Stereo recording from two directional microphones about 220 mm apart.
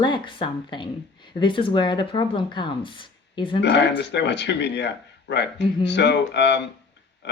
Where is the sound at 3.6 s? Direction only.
50° left (ahead or behind).